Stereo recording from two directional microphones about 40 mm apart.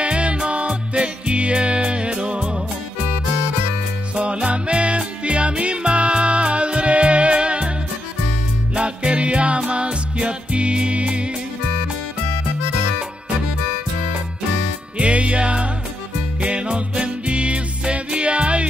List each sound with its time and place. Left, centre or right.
0.0 s music: right
4.1 s music: right
8.7 s music: right
15.0 s music: right